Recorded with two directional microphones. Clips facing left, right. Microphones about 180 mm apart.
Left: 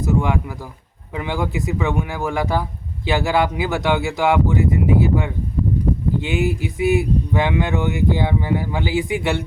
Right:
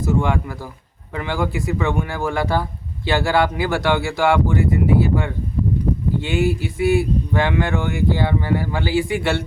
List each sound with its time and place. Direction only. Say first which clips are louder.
0.0 s speech: even; 15° left (ahead or behind)